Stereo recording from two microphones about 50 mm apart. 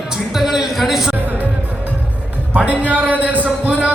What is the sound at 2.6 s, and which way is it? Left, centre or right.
Speech, right.